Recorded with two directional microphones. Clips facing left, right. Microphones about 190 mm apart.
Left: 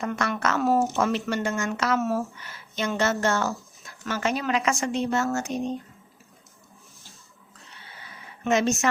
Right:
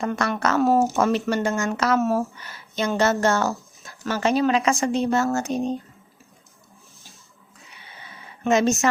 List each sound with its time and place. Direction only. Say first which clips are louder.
0.0 s speech: right 3 dB; 35° right (ahead or behind)
7.6 s a sound: right 1 dB; 15° right (ahead or behind)
8.4 s speech: right 3 dB; 40° right (ahead or behind)